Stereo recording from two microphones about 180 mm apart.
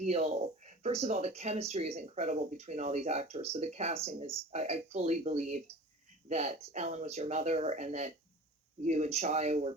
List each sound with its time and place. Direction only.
0.0 s speech: 40° right (ahead or behind)